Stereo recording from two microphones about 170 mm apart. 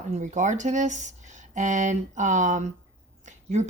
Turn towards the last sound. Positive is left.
turn(degrees=-45)  # may be behind; listen again after turning